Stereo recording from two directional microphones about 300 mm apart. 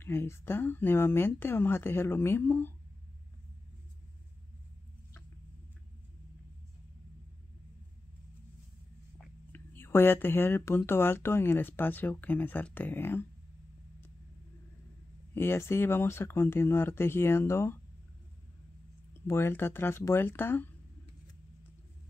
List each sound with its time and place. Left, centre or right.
0.0 s speech: centre
9.5 s speech: centre
15.3 s speech: centre
19.2 s speech: centre